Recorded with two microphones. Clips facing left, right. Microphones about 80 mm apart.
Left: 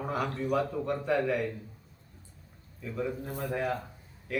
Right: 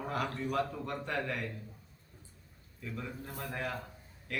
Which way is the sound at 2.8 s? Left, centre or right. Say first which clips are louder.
Left 8 dB; centre.